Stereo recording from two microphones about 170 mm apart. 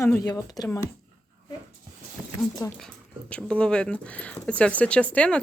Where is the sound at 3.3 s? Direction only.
5° left (ahead or behind).